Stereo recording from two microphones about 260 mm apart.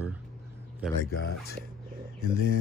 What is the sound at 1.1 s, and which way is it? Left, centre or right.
Speech, left.